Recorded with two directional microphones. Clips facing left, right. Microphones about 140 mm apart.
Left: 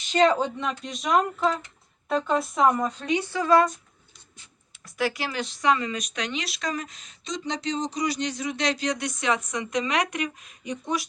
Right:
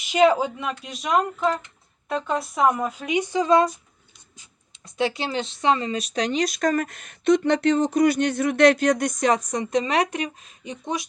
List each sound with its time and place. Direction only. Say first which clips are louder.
0.0 s speech: right 3 dB; 10° right (ahead or behind); by 11.0 s 25° right (ahead or behind)